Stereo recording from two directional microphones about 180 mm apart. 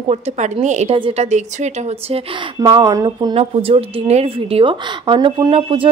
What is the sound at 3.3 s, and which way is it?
A woman's voice, 30° right (ahead or behind).